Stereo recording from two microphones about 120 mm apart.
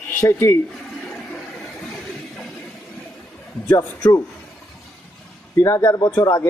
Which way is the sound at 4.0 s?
35° left (ahead or behind).